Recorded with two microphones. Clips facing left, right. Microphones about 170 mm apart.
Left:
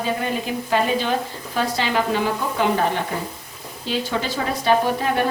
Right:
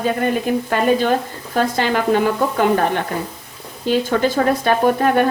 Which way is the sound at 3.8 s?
50° right (ahead or behind).